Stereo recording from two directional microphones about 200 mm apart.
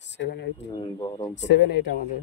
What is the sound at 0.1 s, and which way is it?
Speech, 60° left (ahead or behind).